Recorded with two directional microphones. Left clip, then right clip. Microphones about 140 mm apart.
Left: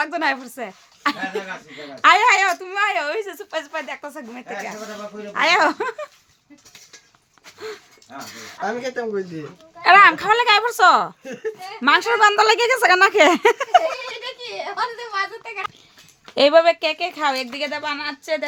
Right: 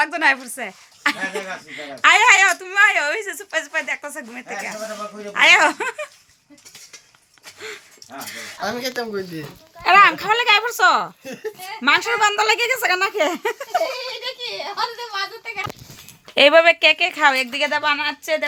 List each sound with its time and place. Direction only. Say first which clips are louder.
0.0 s a woman's voice: right 4 dB; 15° left (ahead or behind)
8.6 s a woman's voice: left 1 dB; 10° left (ahead or behind)
11.2 s a woman's voice: left 2 dB; centre (ahead or behind)
11.8 s a woman's voice: left 2 dB; 25° left (ahead or behind); by 13.8 s 60° left (ahead or behind)
16.3 s a woman's voice: right 2 dB; 5° left (ahead or behind); by 18.4 s 15° right (ahead or behind)